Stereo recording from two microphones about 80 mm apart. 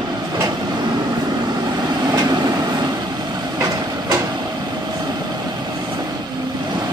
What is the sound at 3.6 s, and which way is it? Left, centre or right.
Train, right.